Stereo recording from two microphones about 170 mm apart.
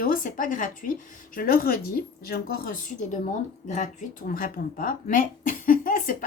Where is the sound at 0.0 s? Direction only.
55° left (ahead or behind).